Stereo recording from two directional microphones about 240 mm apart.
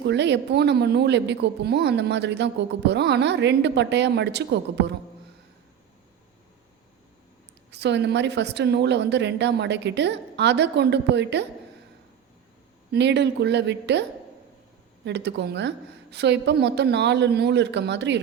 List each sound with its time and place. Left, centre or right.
0.0 s speech: right
7.7 s speech: right
12.9 s speech: right
15.0 s speech: right